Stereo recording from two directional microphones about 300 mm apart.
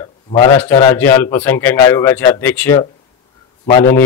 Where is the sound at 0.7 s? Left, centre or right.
Centre.